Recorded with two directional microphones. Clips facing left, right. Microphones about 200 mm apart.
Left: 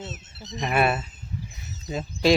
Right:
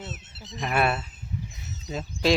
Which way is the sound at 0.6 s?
Centre (ahead or behind).